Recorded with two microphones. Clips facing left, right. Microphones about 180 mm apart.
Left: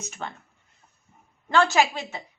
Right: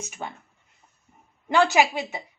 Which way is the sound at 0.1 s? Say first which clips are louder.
Left 2 dB; 10° right (ahead or behind).